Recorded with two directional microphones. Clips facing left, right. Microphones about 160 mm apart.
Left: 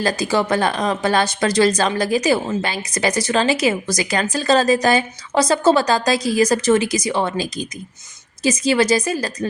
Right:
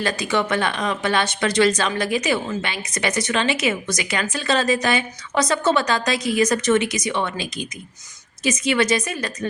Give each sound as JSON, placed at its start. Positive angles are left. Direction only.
{"t": 0.0, "sound": "speech", "side_deg": 35}